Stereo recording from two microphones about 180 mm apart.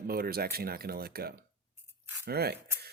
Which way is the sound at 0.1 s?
55° right (ahead or behind).